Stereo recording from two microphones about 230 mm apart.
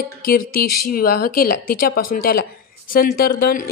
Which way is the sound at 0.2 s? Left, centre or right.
Left.